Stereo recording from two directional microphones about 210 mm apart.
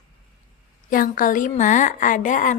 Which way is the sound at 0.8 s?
40° left (ahead or behind).